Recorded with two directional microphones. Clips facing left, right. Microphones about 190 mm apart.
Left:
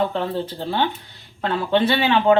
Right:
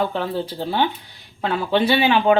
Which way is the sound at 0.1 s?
5° right (ahead or behind).